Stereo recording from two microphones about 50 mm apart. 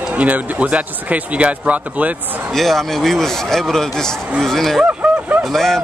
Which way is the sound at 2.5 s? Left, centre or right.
Centre.